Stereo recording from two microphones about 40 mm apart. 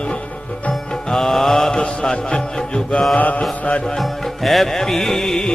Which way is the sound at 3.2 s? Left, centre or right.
Left.